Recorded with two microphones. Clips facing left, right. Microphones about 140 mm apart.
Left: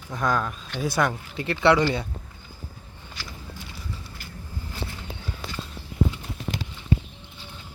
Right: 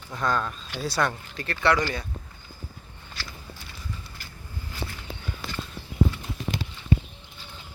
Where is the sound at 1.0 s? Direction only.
15° left (ahead or behind).